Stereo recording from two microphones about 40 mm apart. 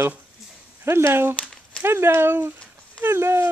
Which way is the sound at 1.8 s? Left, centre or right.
Right.